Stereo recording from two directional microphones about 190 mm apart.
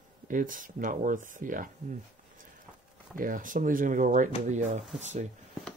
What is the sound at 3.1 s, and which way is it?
Speech, 45° right (ahead or behind).